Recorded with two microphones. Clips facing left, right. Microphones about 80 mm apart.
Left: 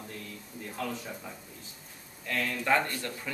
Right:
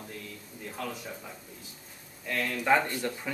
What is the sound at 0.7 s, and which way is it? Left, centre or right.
Speech, centre.